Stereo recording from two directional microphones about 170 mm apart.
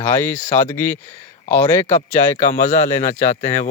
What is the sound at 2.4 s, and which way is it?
A man's voice, 45° left (ahead or behind).